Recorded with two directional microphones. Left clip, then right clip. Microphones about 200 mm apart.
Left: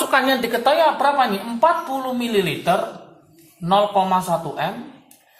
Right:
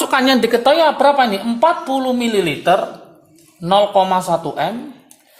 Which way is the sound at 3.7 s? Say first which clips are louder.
Right 4 dB; 55° right (ahead or behind).